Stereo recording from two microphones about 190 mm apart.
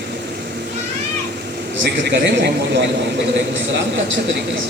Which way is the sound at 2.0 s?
65° right (ahead or behind).